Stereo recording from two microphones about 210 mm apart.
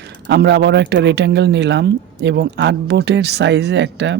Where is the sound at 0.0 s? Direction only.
55° right (ahead or behind).